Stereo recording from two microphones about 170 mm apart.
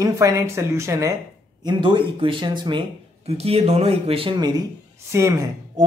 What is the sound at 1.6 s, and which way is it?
Speech, 30° right (ahead or behind).